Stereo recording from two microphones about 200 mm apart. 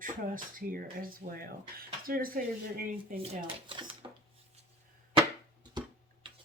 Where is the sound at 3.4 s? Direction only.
25° right (ahead or behind).